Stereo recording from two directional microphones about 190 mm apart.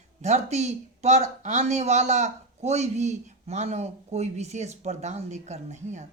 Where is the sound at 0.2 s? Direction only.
35° right (ahead or behind).